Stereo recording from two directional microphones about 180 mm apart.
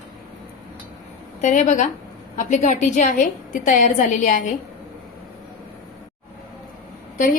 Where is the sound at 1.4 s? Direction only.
40° left (ahead or behind).